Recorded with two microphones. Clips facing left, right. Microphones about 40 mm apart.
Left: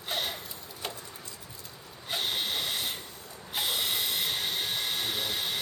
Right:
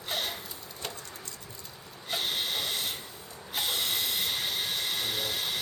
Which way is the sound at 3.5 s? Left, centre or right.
Centre.